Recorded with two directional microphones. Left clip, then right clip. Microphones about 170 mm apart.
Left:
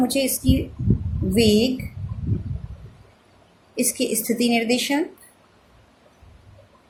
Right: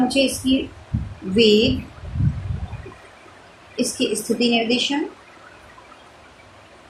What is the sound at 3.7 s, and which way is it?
A woman's voice, 55° left (ahead or behind).